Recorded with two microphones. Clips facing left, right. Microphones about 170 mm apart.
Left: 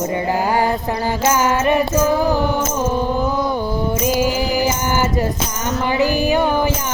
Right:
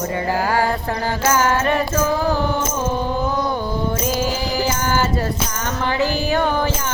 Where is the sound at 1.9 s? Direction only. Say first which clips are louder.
Left 3 dB; 10° left (ahead or behind).